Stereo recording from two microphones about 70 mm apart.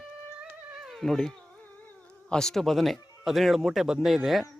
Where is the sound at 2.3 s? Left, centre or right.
Centre.